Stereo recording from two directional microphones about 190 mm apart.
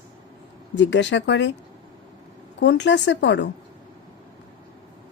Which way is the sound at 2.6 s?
70° left (ahead or behind).